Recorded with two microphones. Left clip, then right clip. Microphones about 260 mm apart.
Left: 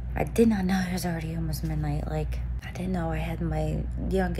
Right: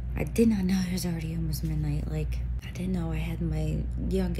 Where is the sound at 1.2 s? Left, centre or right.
Centre.